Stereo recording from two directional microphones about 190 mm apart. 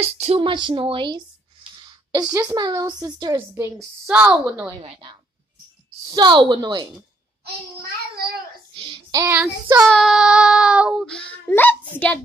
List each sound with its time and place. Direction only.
0.0 s a woman's voice: 30° right (ahead or behind); by 3.7 s 15° right (ahead or behind)
3.7 s a woman's voice: 5° right (ahead or behind)
6.0 s a woman's voice: 25° right (ahead or behind)
8.7 s child singing: 25° right (ahead or behind)
9.2 s a woman's voice: 10° right (ahead or behind)
9.8 s child singing: centre (ahead or behind)